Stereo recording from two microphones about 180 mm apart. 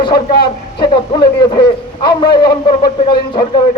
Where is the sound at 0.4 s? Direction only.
25° left (ahead or behind).